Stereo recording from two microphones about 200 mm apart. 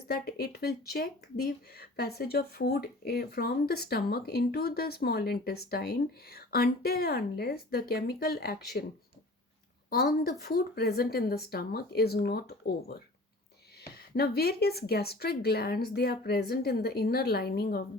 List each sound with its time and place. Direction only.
0.1 s speech: 50° left (ahead or behind)
9.9 s speech: 50° left (ahead or behind)
14.1 s speech: 50° left (ahead or behind)